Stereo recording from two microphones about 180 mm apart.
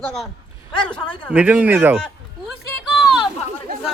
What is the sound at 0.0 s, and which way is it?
Speech, 5° left (ahead or behind).